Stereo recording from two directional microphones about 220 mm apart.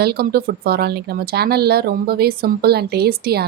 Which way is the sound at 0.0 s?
45° right (ahead or behind).